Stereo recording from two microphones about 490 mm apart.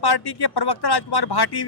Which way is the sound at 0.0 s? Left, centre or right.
Left.